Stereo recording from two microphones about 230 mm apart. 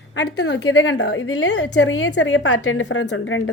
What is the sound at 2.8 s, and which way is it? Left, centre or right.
Speech, left.